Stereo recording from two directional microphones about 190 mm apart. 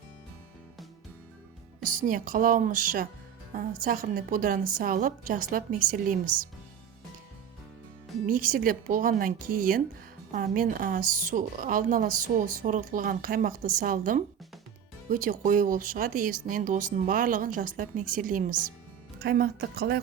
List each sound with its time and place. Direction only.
1.8 s a woman's voice: 45° right (ahead or behind)
8.3 s a woman's voice: 45° right (ahead or behind)